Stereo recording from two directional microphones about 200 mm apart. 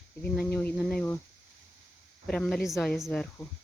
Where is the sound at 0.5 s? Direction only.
5° left (ahead or behind).